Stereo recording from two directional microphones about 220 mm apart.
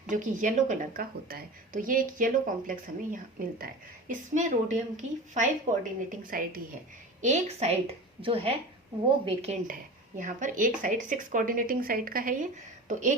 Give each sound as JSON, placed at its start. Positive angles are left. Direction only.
{"t": 0.1, "sound": "a woman's voice", "side_deg": -35}